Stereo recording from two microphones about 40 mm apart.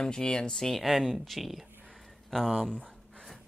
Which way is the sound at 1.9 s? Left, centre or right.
Centre.